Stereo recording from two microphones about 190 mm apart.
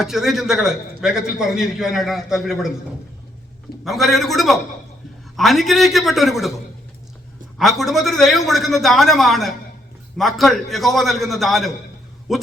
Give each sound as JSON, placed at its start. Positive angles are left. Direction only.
{"t": 0.0, "sound": "a man's voice", "side_deg": 0}
{"t": 3.8, "sound": "a man's voice", "side_deg": 0}
{"t": 7.6, "sound": "a man's voice", "side_deg": 0}